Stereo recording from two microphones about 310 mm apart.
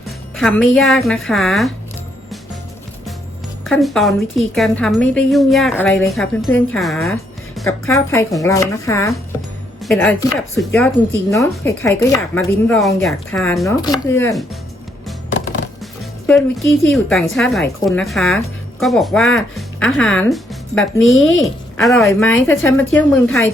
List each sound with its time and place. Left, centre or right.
0.3 s a woman's voice: centre
3.7 s a woman's voice: centre
15.3 s music: left
16.2 s a woman's voice: centre